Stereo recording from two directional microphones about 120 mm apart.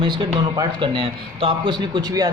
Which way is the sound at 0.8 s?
45° right (ahead or behind).